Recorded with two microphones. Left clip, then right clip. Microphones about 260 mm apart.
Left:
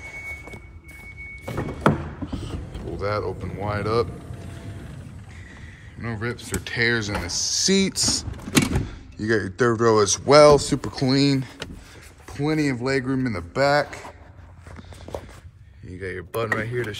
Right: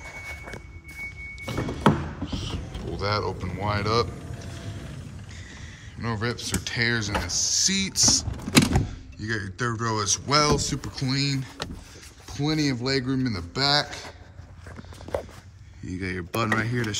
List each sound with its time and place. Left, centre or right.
1.3 s rowboat: centre
5.9 s speech: centre
8.0 s speech: centre
8.5 s speech: centre
15.9 s speech: centre